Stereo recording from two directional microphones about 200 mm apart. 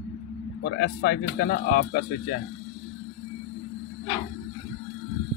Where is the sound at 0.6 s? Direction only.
50° left (ahead or behind).